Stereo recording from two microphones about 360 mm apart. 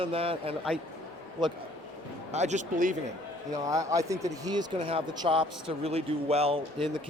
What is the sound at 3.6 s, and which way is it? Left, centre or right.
Speech, centre.